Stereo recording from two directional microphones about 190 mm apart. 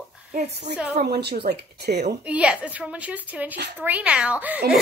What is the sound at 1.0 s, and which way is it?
Speech, 60° right (ahead or behind).